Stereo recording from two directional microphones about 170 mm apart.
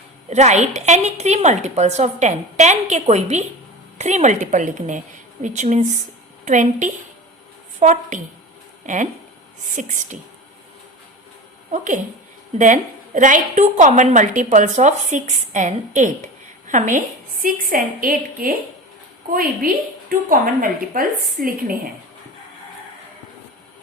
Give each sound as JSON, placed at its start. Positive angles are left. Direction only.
{"t": 0.3, "sound": "a woman's voice", "side_deg": -40}
{"t": 12.5, "sound": "a woman's voice", "side_deg": -45}